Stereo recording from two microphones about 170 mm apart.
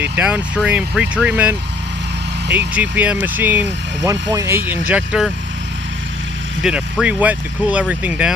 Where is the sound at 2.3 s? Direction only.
80° right.